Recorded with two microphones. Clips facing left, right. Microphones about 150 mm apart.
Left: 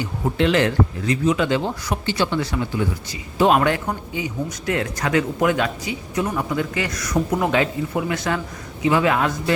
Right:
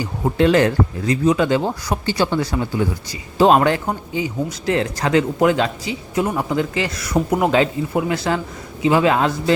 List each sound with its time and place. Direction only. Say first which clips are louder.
0.3 s speech: right 3 dB; 40° right (ahead or behind)